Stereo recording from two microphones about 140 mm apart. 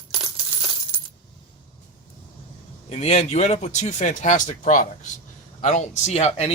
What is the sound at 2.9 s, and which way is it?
Speech, 55° left (ahead or behind).